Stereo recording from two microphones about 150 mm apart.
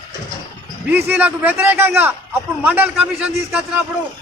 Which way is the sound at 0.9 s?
10° right (ahead or behind).